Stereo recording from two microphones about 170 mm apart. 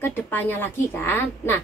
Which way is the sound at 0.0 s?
10° left (ahead or behind).